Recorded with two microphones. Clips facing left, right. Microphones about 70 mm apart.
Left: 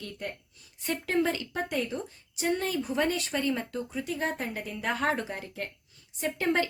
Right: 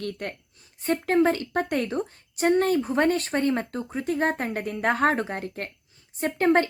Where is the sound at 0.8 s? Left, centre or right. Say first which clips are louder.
Right 7 dB; right.